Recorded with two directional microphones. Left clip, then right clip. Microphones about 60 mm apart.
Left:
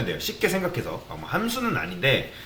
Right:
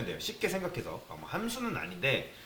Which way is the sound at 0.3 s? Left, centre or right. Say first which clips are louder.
Left 9 dB; left.